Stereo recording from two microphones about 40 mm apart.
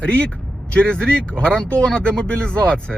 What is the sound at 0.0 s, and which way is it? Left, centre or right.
Speech, left.